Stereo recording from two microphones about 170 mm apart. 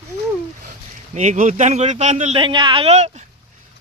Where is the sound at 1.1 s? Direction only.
45° right (ahead or behind).